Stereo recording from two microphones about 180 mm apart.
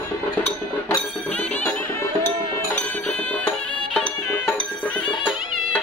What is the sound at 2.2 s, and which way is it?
Music, 10° left (ahead or behind).